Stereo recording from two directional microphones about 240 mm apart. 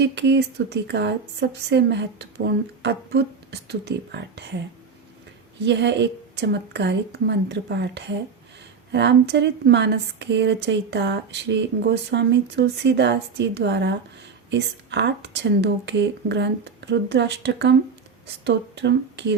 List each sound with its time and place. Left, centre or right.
0.0 s speech: right
5.6 s speech: right